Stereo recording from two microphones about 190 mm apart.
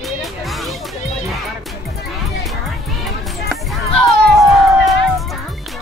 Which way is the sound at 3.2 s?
Centre (ahead or behind).